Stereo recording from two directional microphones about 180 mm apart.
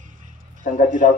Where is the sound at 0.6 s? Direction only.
45° left (ahead or behind).